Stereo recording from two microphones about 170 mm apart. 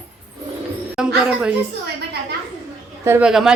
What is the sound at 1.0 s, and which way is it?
Speech, 5° right (ahead or behind).